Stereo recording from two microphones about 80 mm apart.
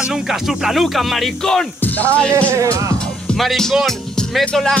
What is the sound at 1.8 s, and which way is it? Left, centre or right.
Speech, centre.